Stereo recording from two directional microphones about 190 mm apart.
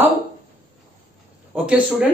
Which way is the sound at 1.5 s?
5° right (ahead or behind).